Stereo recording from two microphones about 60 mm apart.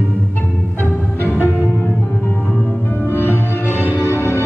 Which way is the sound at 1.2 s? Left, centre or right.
Right.